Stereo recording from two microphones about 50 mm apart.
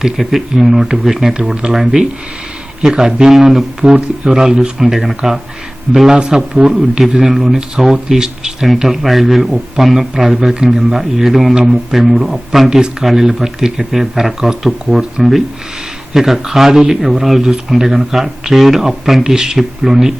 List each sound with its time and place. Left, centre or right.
0.0 s speech: centre
3.9 s speech: right
4.4 s speech: centre
6.1 s speech: centre